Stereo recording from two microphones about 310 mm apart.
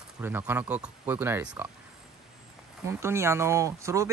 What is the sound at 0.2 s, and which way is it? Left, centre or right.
Speech, centre.